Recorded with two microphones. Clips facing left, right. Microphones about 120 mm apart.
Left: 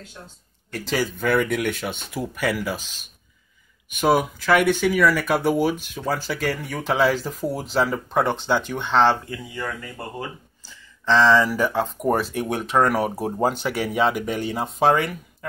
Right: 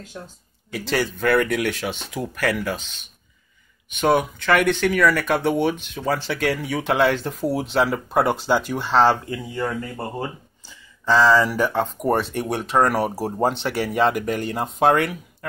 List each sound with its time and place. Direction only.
0.7 s speech: centre (ahead or behind)
9.3 s speech: 25° right (ahead or behind)
10.6 s a sound: 15° right (ahead or behind)
11.1 s speech: 5° right (ahead or behind)